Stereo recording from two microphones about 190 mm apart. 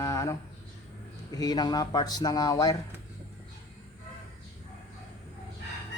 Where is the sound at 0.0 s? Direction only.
15° left (ahead or behind).